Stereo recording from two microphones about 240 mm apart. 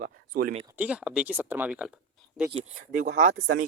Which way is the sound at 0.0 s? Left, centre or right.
Right.